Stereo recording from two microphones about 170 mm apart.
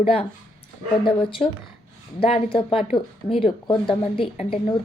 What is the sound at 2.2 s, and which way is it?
A woman's voice, 35° left (ahead or behind).